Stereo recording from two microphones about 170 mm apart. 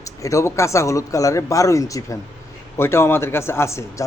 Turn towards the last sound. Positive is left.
turn(degrees=15)  # may be behind; listen again after turning